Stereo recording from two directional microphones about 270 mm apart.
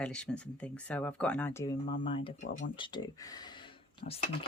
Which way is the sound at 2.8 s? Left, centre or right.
Centre.